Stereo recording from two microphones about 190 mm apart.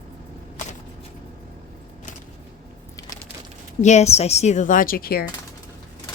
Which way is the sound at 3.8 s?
35° left (ahead or behind).